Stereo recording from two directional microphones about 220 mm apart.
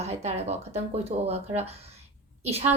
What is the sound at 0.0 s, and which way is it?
A woman's voice, 30° right (ahead or behind).